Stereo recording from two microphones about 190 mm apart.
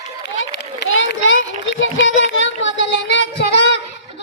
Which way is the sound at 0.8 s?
75° left (ahead or behind).